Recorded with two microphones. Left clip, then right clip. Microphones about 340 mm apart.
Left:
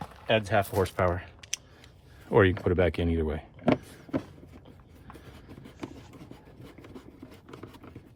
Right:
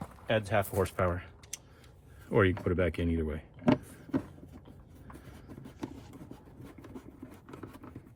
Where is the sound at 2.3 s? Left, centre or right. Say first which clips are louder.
Left 5 dB; left.